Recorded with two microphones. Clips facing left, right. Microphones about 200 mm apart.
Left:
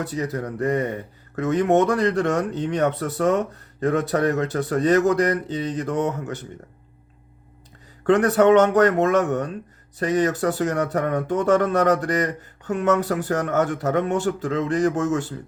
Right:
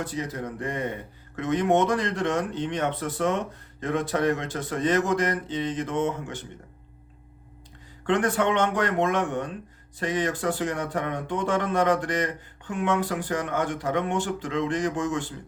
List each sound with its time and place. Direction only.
0.6 s speech: 40° left (ahead or behind)
8.0 s speech: 40° left (ahead or behind)